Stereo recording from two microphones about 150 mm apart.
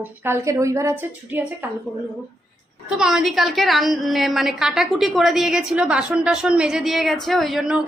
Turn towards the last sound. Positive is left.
turn(degrees=-5)  # may be behind; listen again after turning